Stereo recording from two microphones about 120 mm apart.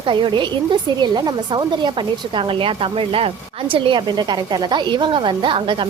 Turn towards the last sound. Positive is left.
turn(degrees=-45)  # may be behind; listen again after turning